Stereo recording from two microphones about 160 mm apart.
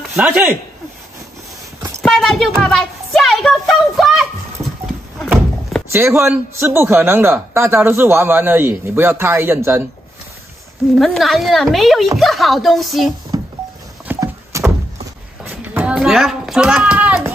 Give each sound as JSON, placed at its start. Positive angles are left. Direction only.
{"t": 0.1, "sound": "speech", "side_deg": -10}
{"t": 2.0, "sound": "speech", "side_deg": 0}
{"t": 2.6, "sound": "a sound", "side_deg": 0}
{"t": 5.9, "sound": "speech", "side_deg": -15}
{"t": 11.0, "sound": "a woman's voice", "side_deg": 0}
{"t": 13.3, "sound": "music", "side_deg": -25}
{"t": 14.0, "sound": "a sound", "side_deg": -20}